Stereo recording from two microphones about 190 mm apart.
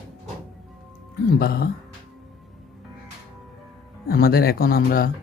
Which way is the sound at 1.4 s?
55° left (ahead or behind).